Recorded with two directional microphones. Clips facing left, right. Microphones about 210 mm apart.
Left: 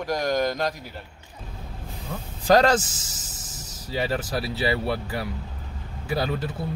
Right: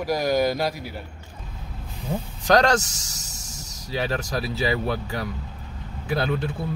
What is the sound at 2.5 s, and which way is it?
Speech, 5° left (ahead or behind).